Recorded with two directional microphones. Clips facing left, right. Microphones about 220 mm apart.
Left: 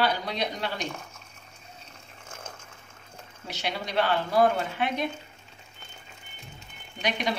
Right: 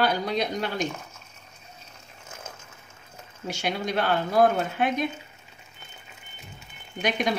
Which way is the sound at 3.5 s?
50° right (ahead or behind).